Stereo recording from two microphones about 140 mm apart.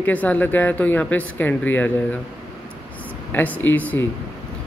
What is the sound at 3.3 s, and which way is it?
Speech, 15° left (ahead or behind).